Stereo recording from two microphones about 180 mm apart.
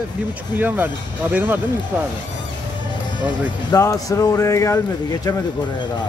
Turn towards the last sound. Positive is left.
turn(degrees=15)  # may be behind; listen again after turning